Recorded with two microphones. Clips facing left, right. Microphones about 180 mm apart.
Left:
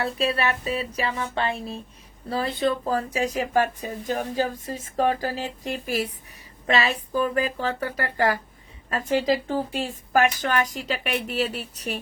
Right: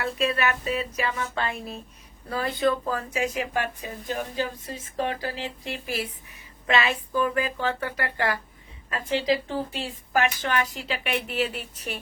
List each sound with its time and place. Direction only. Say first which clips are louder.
0.0 s a woman's voice: left 1 dB; 30° left (ahead or behind)